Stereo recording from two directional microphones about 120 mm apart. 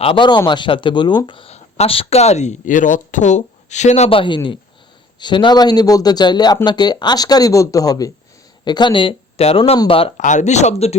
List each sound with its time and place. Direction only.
0.0 s speech: 45° left (ahead or behind)
1.5 s speech: 60° left (ahead or behind)
4.1 s speech: 45° left (ahead or behind)
10.2 s speech: 90° left; by 10.9 s 65° left (ahead or behind)